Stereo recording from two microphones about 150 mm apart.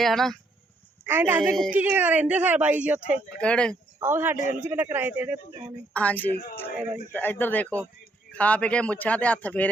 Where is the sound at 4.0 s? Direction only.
15° right (ahead or behind).